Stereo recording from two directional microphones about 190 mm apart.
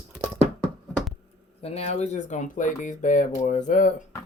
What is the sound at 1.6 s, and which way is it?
Speech, 35° left (ahead or behind).